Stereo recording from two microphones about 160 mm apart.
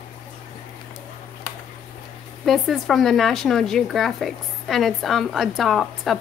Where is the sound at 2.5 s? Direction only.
Centre (ahead or behind).